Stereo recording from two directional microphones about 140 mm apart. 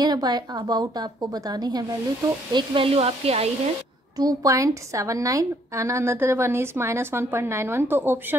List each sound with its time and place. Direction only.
0.0 s a woman's voice: 30° right (ahead or behind); by 3.4 s 45° right (ahead or behind)
4.2 s a woman's voice: 25° right (ahead or behind)